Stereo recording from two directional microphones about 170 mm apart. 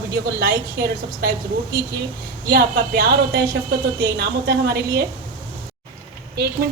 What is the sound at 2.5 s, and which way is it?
Speech, 65° right (ahead or behind).